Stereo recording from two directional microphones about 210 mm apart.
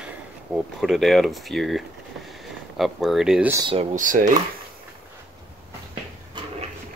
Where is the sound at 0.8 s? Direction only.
Centre (ahead or behind).